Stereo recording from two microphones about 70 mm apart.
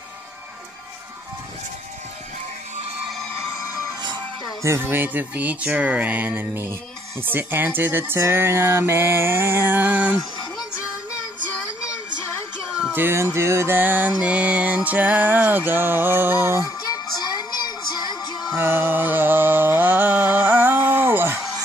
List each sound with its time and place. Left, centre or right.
4.6 s music: right
6.5 s music: right
12.9 s music: right
13.7 s music: right
16.6 s music: left
18.6 s music: right